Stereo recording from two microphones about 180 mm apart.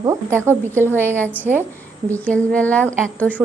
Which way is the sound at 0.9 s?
10° left (ahead or behind).